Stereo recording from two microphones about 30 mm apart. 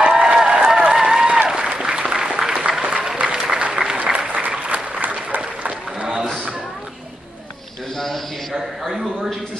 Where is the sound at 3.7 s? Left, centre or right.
Right.